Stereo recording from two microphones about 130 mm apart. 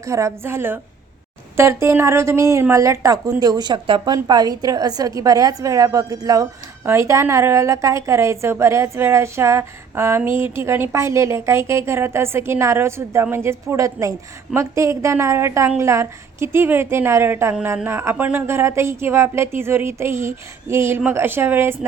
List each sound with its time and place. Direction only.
0.0 s speech: 25° right (ahead or behind)